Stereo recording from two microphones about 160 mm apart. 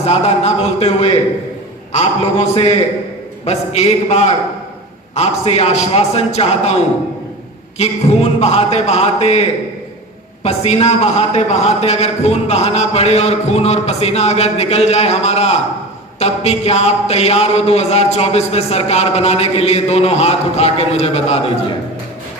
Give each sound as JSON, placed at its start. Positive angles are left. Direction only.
{"t": 0.0, "sound": "speech", "side_deg": 40}
{"t": 3.4, "sound": "speech", "side_deg": 40}